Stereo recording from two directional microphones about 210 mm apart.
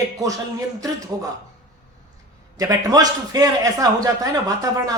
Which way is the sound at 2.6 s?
15° right (ahead or behind).